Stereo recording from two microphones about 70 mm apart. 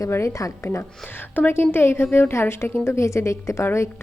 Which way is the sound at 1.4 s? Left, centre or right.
Left.